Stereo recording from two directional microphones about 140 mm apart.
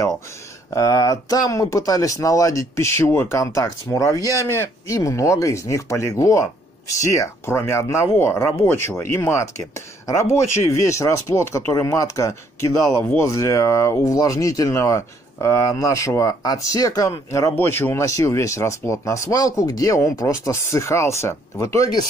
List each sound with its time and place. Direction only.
0.7 s speech: 25° left (ahead or behind)